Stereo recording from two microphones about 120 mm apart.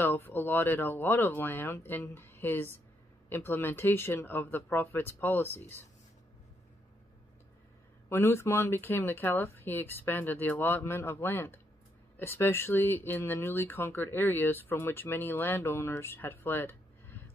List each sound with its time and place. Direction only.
0.0 s speech: 15° left (ahead or behind)
8.1 s speech: 20° left (ahead or behind)